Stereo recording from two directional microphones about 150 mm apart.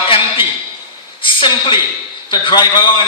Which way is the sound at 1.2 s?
35° left (ahead or behind).